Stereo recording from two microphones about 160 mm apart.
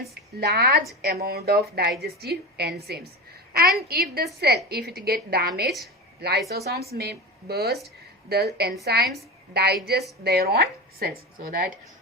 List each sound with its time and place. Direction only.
0.0 s a woman's voice: 80° right
4.4 s a woman's voice: 85° right
6.9 s a woman's voice: 80° right